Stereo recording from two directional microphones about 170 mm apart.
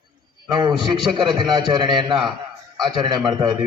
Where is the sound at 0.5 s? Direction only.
25° right (ahead or behind).